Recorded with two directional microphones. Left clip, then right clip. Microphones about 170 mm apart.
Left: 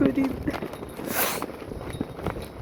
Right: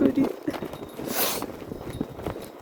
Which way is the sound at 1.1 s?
40° right (ahead or behind).